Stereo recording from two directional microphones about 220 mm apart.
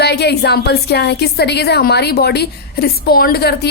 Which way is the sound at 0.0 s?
50° left (ahead or behind).